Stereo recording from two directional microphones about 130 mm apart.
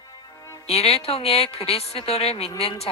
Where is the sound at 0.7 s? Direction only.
50° left (ahead or behind).